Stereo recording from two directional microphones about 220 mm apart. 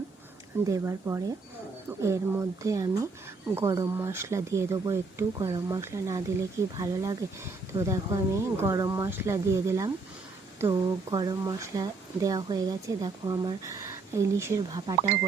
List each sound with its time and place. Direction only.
0.7 s speech: 10° right (ahead or behind)